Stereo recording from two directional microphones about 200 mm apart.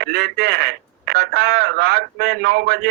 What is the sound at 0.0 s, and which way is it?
Speech, 50° right (ahead or behind).